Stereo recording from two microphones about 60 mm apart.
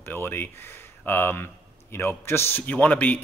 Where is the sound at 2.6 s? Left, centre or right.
Left.